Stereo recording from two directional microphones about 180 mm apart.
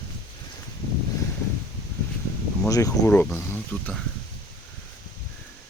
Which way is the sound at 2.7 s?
15° left (ahead or behind).